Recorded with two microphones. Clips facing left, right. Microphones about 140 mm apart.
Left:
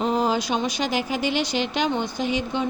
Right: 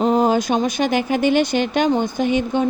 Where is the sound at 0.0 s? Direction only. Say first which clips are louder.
Right 6 dB; 45° right (ahead or behind).